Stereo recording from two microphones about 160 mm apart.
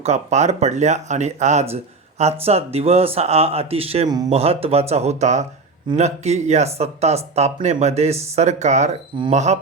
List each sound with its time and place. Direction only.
0.0 s speech: 45° right (ahead or behind)